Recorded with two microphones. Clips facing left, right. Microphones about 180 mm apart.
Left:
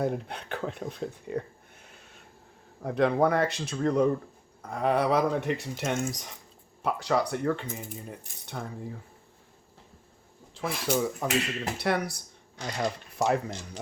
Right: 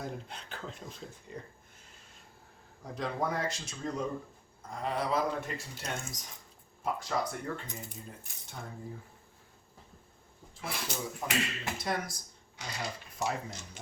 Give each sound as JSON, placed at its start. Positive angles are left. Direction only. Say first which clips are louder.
{"t": 0.0, "sound": "speech", "louder": "left 11 dB", "side_deg": 65}
{"t": 10.5, "sound": "speech", "louder": "left 10 dB", "side_deg": 70}